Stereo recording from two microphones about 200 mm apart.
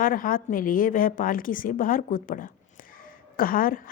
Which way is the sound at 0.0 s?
45° left (ahead or behind).